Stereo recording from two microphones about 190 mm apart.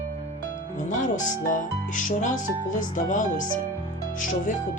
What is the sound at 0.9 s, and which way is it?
Speech, 40° left (ahead or behind).